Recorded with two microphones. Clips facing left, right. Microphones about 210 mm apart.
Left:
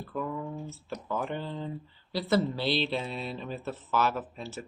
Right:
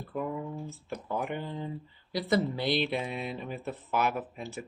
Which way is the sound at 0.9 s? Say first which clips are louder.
Even; 15° right (ahead or behind).